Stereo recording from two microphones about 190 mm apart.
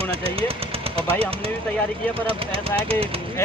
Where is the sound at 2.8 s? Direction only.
30° right (ahead or behind).